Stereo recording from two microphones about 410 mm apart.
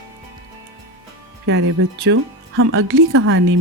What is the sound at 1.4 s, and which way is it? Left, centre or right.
Speech, right.